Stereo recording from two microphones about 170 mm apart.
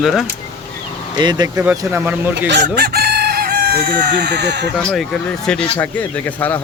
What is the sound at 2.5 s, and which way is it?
Chicken, 75° right (ahead or behind).